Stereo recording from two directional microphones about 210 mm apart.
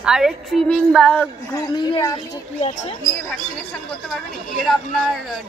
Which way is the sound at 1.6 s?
20° left (ahead or behind).